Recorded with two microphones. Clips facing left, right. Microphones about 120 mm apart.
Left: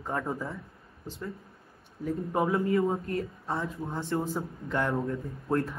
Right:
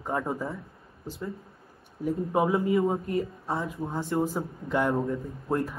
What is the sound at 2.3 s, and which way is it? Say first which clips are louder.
Speech: right 2 dB; 25° right (ahead or behind).